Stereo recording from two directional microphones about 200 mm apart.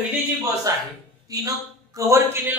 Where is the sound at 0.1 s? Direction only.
15° right (ahead or behind).